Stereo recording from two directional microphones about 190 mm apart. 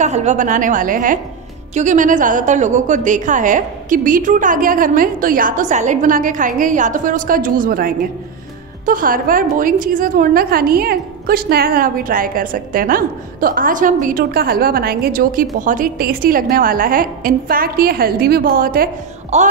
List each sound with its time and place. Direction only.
0.0 s a woman's voice: 35° right (ahead or behind)
19.3 s speech: 35° right (ahead or behind)